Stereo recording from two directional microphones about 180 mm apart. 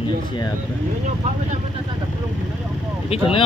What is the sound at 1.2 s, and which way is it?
Speech, 40° right (ahead or behind).